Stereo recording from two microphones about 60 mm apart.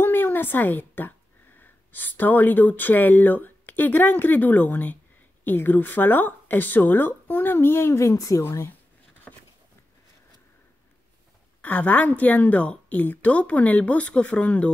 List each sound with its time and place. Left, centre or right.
0.0 s a sound: left
1.6 s speech: left
8.0 s a woman's voice: left
8.4 s speech: left
11.6 s a woman's voice: left